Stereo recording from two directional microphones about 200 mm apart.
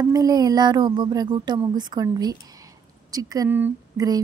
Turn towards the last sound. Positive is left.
turn(degrees=-20)  # may be behind; listen again after turning